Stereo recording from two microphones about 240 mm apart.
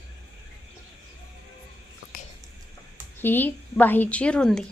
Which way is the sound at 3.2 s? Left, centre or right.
Centre.